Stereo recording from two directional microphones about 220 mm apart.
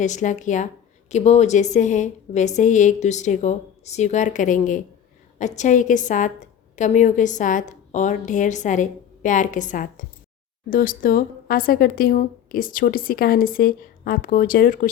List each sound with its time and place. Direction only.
0.0 s a woman's voice: 35° left (ahead or behind)